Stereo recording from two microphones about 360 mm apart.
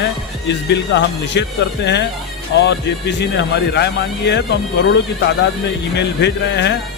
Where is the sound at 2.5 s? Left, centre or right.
Left.